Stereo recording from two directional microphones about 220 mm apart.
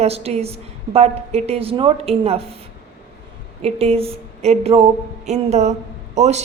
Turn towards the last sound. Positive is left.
turn(degrees=-30)  # may be behind; listen again after turning